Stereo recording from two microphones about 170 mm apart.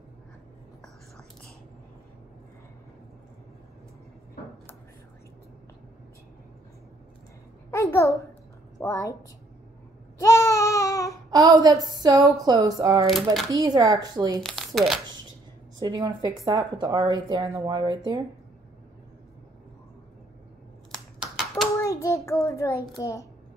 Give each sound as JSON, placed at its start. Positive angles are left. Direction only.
{"t": 7.7, "sound": "a sound", "side_deg": 15}
{"t": 8.7, "sound": "a woman's voice", "side_deg": 20}
{"t": 10.1, "sound": "a sound", "side_deg": 20}
{"t": 11.2, "sound": "speech", "side_deg": -20}
{"t": 13.0, "sound": "speech", "side_deg": 0}
{"t": 13.5, "sound": "speech", "side_deg": -20}
{"t": 14.4, "sound": "speech", "side_deg": 0}
{"t": 15.8, "sound": "speech", "side_deg": -25}
{"t": 20.9, "sound": "computer keyboard", "side_deg": 0}
{"t": 21.7, "sound": "child singing", "side_deg": 20}
{"t": 22.9, "sound": "a child's voice", "side_deg": 20}